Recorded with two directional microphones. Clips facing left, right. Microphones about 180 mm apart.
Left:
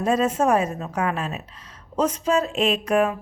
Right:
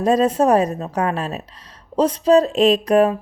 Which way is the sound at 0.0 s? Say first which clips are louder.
Right 5 dB; 35° right (ahead or behind).